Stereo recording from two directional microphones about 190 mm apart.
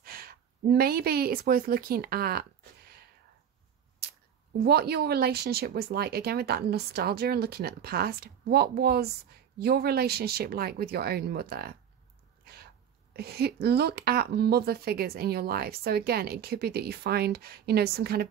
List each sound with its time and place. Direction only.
0.0 s a woman's voice: 50° right (ahead or behind)
4.6 s a woman's voice: 55° right (ahead or behind)
13.1 s a woman's voice: 55° right (ahead or behind)